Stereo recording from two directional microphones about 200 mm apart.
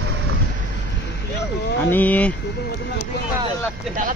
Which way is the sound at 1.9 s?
10° left (ahead or behind).